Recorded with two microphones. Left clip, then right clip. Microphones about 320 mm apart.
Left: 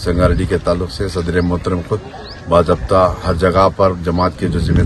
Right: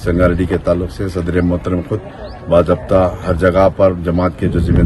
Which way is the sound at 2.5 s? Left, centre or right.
Centre.